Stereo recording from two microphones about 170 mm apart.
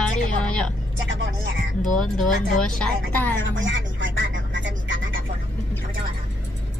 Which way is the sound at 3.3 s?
90° right.